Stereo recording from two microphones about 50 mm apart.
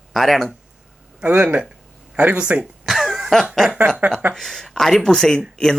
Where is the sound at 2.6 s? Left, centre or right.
Centre.